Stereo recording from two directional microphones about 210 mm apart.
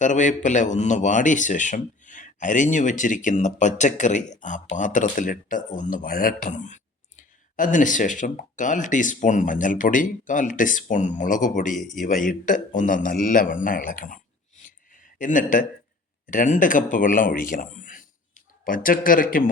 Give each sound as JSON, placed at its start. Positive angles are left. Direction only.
{"t": 0.0, "sound": "a man's voice", "side_deg": 35}